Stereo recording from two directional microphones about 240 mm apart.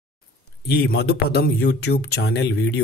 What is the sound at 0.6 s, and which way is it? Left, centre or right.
Speech, left.